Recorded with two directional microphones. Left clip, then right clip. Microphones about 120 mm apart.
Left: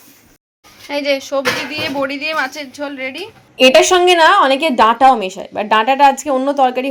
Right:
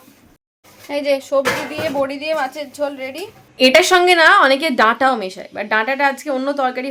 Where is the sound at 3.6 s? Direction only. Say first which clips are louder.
Left 2 dB; 10° left (ahead or behind).